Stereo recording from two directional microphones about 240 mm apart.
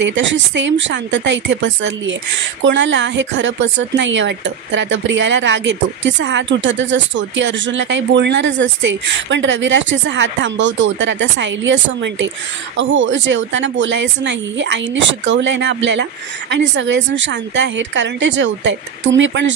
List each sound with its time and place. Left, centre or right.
0.0 s speech: right